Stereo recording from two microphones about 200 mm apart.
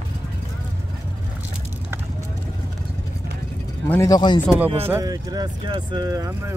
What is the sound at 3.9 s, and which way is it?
Speech, 15° left (ahead or behind).